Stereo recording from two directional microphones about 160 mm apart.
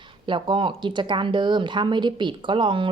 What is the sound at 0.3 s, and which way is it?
A woman's voice, 30° right (ahead or behind).